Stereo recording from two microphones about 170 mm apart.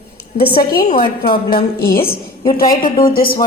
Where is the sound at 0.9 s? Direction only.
30° left (ahead or behind).